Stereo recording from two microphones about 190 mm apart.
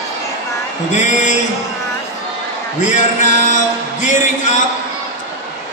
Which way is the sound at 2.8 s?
40° left (ahead or behind).